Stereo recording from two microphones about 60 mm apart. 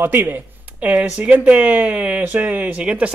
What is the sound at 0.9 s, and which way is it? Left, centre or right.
Speech, centre.